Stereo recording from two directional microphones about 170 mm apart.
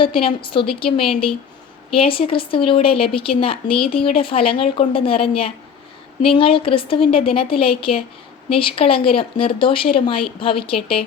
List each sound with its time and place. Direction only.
0.0 s a woman's voice: 30° left (ahead or behind)